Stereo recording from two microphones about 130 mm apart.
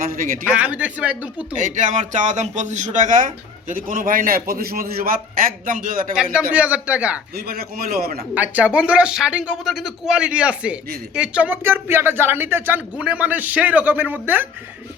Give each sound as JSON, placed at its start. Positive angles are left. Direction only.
{"t": 0.4, "sound": "speech", "side_deg": -10}
{"t": 1.5, "sound": "a man's voice", "side_deg": -80}
{"t": 6.5, "sound": "speech", "side_deg": -10}
{"t": 8.4, "sound": "speech", "side_deg": -10}